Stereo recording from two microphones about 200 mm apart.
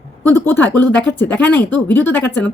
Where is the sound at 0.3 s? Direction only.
10° left (ahead or behind).